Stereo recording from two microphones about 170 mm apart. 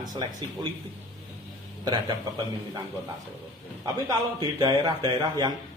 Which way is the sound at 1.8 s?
25° right (ahead or behind).